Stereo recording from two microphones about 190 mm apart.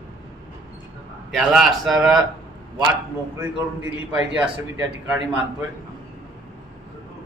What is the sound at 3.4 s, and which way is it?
A man's voice, 10° right (ahead or behind).